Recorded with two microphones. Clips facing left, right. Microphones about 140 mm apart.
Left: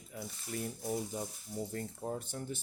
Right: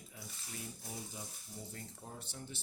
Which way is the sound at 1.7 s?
55° left (ahead or behind).